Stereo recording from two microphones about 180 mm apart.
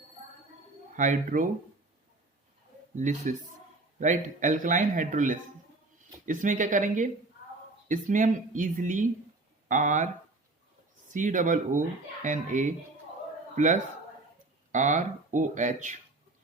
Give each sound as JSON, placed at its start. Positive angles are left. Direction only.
{"t": 0.9, "sound": "speech", "side_deg": -45}
{"t": 2.9, "sound": "speech", "side_deg": -45}
{"t": 11.1, "sound": "speech", "side_deg": -45}
{"t": 14.7, "sound": "speech", "side_deg": -45}